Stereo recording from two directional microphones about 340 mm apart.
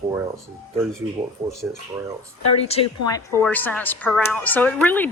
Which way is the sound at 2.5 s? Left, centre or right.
Centre.